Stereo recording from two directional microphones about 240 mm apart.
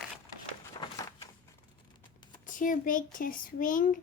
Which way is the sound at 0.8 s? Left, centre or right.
Centre.